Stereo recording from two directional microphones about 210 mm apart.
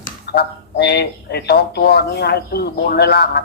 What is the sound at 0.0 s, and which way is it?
Speech, 50° left (ahead or behind).